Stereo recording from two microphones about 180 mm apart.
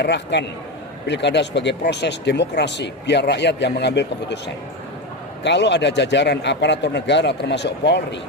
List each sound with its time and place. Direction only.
0.0 s speech: 70° left (ahead or behind)